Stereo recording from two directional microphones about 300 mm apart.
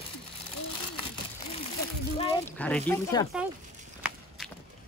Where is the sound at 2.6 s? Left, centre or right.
Centre.